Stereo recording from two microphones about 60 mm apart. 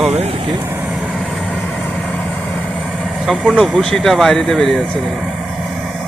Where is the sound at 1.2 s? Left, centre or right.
Centre.